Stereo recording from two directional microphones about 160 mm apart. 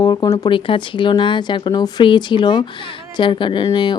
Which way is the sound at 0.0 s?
25° left (ahead or behind).